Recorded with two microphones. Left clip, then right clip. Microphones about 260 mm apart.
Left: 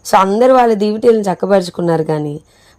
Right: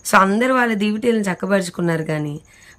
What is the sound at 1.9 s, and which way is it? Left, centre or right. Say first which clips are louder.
Speech: left 7 dB; centre.